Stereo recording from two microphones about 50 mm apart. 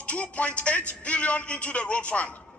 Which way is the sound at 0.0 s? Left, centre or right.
Left.